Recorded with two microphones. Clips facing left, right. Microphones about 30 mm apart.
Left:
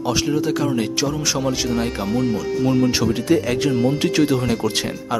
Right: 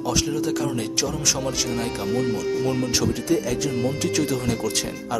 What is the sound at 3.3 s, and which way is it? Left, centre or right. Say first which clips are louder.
A man's voice: left 7 dB; left.